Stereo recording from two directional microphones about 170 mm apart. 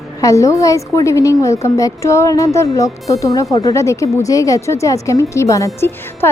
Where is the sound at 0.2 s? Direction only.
20° left (ahead or behind).